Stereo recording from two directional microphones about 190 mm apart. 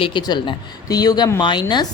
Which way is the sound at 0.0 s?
25° left (ahead or behind).